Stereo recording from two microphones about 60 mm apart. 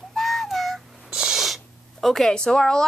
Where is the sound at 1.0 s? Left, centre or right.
Centre.